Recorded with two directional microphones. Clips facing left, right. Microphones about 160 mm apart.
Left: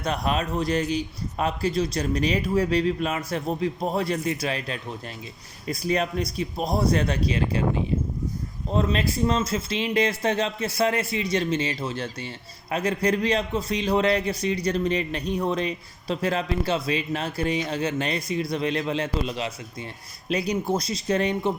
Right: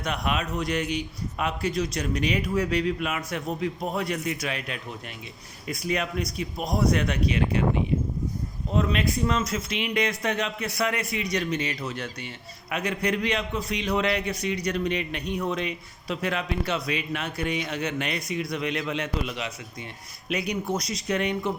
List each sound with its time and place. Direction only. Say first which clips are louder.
0.0 s a man's voice: left 3 dB; 35° left (ahead or behind)
8.7 s a man's voice: left 1 dB; 35° left (ahead or behind)